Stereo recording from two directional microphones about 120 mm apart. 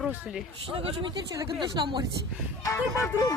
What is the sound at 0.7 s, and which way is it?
Speech, 45° right (ahead or behind).